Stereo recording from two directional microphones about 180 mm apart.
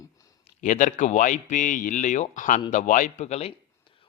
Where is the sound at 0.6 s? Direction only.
45° left (ahead or behind).